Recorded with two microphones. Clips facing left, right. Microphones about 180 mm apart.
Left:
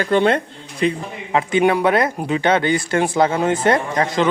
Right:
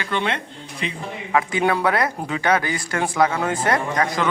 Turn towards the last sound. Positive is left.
turn(degrees=25)  # may be behind; listen again after turning